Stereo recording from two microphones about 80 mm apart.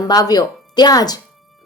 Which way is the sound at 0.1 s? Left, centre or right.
Left.